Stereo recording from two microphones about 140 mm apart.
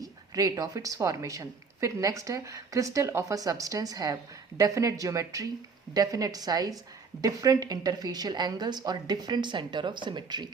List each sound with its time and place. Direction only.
0.0 s speech: 25° right (ahead or behind)